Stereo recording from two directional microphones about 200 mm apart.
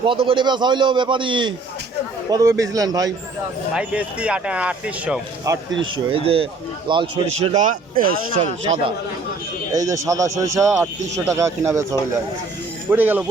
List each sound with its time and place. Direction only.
0.0 s a man's voice: 25° right (ahead or behind)
3.8 s speech: 5° right (ahead or behind)
5.5 s speech: 15° right (ahead or behind)
5.8 s a man's voice: 25° right (ahead or behind)
7.5 s speech: 40° right (ahead or behind)
8.6 s a man's voice: 30° right (ahead or behind)
9.8 s speech: 15° right (ahead or behind)
12.9 s speech: 10° right (ahead or behind)